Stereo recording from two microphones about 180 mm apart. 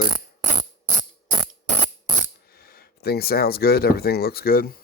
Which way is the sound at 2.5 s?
55° left (ahead or behind).